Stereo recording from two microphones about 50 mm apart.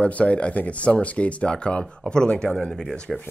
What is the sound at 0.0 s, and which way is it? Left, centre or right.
Speech, left.